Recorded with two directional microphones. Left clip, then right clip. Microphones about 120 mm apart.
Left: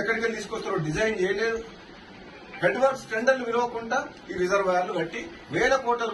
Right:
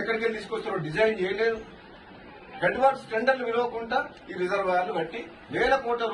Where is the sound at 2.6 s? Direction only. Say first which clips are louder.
Even; centre (ahead or behind).